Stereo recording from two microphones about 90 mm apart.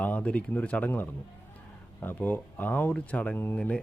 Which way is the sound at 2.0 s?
20° left (ahead or behind).